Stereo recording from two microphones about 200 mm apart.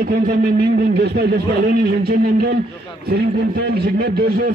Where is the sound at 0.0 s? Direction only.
45° right (ahead or behind).